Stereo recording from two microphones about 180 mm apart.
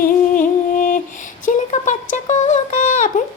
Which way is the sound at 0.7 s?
45° left (ahead or behind).